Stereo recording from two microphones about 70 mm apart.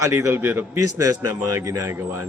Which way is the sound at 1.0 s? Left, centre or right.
Right.